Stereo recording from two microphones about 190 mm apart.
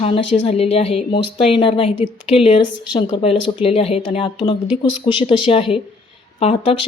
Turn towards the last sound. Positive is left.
turn(degrees=30)  # may be behind; listen again after turning